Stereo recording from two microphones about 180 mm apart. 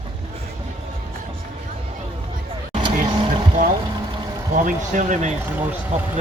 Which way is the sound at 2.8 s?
25° right (ahead or behind).